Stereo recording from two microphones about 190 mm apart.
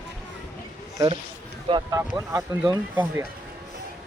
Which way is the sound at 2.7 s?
15° right (ahead or behind).